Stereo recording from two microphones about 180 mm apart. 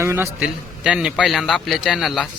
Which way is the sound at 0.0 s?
15° right (ahead or behind).